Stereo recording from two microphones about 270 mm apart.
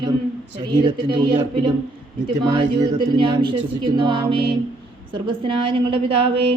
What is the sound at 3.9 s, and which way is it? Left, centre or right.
A man's voice, centre.